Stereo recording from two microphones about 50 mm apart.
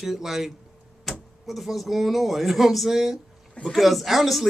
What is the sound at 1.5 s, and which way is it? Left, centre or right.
Speech, centre.